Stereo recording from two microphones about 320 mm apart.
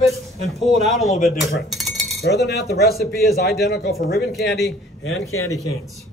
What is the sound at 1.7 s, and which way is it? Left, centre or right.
Cutlery, centre.